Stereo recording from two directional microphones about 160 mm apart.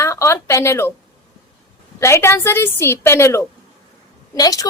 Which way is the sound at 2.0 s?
15° left (ahead or behind).